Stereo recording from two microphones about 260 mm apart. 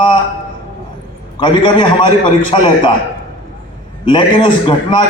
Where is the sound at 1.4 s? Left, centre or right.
Centre.